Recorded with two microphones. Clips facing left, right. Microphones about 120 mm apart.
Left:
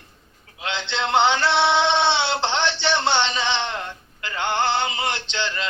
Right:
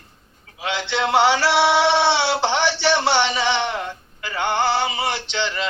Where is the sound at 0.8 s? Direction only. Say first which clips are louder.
Right 2 dB; 20° left (ahead or behind).